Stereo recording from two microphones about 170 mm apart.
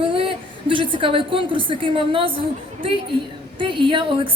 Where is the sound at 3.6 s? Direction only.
30° right (ahead or behind).